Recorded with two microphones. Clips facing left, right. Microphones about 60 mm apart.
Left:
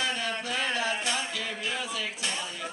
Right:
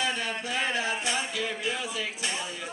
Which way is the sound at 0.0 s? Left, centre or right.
Centre.